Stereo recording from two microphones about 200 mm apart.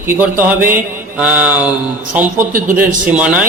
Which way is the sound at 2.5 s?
45° right (ahead or behind).